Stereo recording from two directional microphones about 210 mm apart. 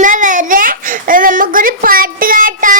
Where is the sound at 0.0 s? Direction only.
40° right (ahead or behind).